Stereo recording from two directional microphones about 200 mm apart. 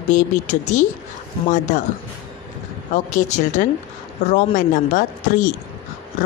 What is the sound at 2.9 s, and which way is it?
A woman's voice, 40° left (ahead or behind).